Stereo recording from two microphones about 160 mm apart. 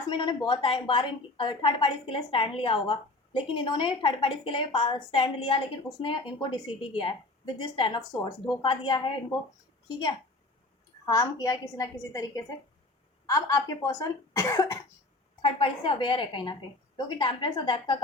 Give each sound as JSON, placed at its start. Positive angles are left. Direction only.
{"t": 0.1, "sound": "a woman's voice", "side_deg": 30}
{"t": 11.0, "sound": "speech", "side_deg": 20}
{"t": 15.4, "sound": "a woman's voice", "side_deg": 35}